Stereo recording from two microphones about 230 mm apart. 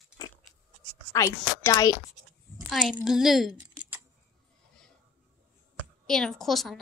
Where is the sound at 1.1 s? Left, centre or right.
Centre.